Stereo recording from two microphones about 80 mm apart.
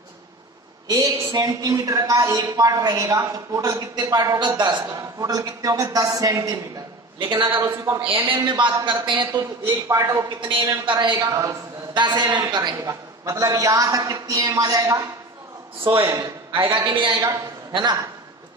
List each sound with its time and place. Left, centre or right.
0.8 s a woman's voice: right
4.4 s a man's voice: right
5.2 s a woman's voice: right
7.2 s a man's voice: right
7.6 s a woman's voice: right
8.5 s a woman's voice: right
9.8 s a woman's voice: right
10.4 s a woman's voice: right
11.1 s a woman's voice: right
11.9 s a man's voice: right
12.8 s a woman's voice: right
15.8 s a woman's voice: right
16.6 s a man's voice: right